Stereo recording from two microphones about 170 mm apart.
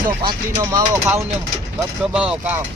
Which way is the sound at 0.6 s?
15° right (ahead or behind).